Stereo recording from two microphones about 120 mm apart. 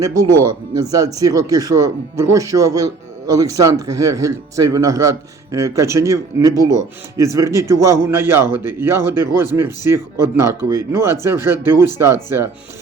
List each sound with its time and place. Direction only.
0.7 s a man's voice: 30° right (ahead or behind)